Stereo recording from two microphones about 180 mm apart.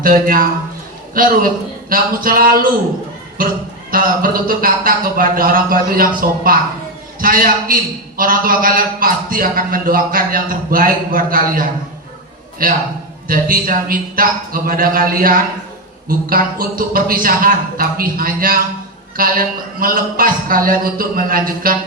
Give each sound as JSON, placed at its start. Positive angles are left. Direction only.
{"t": 0.0, "sound": "a man's voice", "side_deg": -50}
{"t": 3.9, "sound": "a man's voice", "side_deg": -50}